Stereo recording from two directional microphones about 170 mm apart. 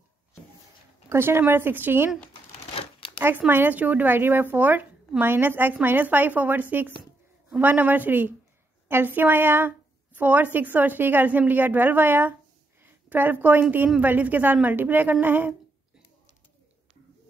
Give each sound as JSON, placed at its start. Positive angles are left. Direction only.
{"t": 1.0, "sound": "speech", "side_deg": -15}
{"t": 2.7, "sound": "crumpling", "side_deg": 30}
{"t": 3.2, "sound": "speech", "side_deg": -10}